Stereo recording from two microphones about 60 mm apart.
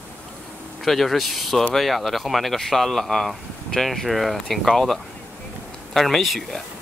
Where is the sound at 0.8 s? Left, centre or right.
Centre.